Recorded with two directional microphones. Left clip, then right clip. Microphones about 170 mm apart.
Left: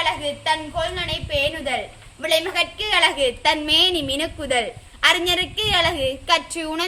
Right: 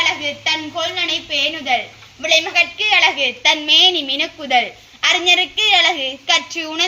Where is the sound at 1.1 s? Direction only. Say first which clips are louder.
Right 4 dB; 30° left (ahead or behind).